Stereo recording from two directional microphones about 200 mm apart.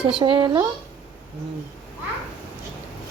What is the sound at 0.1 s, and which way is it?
Speech, 25° right (ahead or behind).